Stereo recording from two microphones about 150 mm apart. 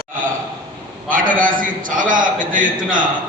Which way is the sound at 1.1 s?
65° right (ahead or behind).